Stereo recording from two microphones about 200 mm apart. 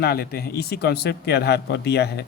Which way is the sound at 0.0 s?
50° left (ahead or behind).